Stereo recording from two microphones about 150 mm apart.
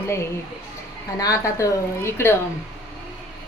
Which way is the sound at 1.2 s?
20° left (ahead or behind).